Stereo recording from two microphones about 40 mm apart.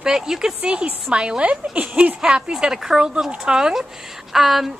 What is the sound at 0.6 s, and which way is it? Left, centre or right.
A woman's voice, right.